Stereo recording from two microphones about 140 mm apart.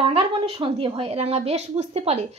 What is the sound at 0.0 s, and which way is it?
A woman's voice, 40° right (ahead or behind).